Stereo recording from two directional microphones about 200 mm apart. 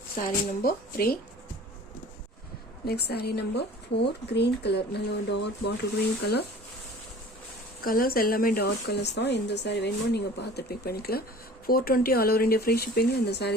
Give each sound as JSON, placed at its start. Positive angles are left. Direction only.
{"t": 0.2, "sound": "speech", "side_deg": 45}
{"t": 2.8, "sound": "speech", "side_deg": 55}
{"t": 7.8, "sound": "speech", "side_deg": 45}